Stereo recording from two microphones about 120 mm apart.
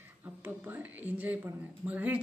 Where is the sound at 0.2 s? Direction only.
15° right (ahead or behind).